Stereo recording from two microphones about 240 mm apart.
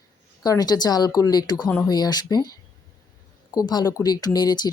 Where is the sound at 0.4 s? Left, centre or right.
Centre.